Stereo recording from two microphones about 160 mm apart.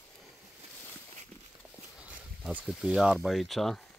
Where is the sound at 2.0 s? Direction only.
10° right (ahead or behind).